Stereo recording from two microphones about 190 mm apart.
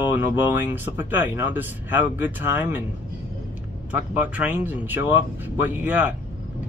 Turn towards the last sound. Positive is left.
turn(degrees=-10)  # may be behind; listen again after turning